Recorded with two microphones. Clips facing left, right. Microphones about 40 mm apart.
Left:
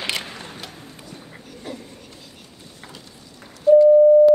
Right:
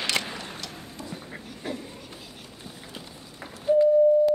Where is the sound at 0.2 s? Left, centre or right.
Centre.